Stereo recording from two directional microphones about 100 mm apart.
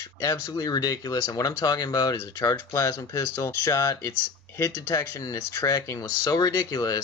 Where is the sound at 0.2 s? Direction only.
35° left (ahead or behind).